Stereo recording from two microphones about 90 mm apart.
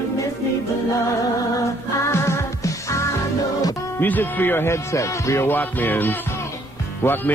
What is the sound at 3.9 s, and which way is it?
Speech, 20° left (ahead or behind).